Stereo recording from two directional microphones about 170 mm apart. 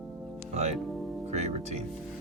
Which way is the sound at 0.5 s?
40° right (ahead or behind).